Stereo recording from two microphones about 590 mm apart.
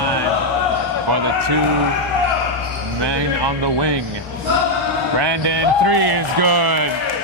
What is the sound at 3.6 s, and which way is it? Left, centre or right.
Speech, right.